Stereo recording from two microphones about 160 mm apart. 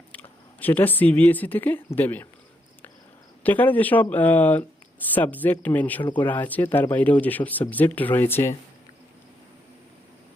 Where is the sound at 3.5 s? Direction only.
10° left (ahead or behind).